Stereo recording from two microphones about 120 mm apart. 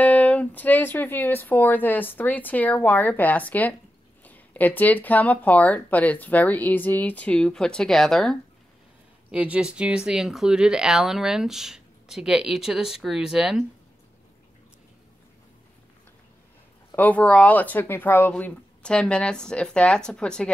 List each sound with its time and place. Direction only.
0.0 s speech: 10° left (ahead or behind)
9.3 s speech: 10° right (ahead or behind)
16.9 s speech: 15° left (ahead or behind)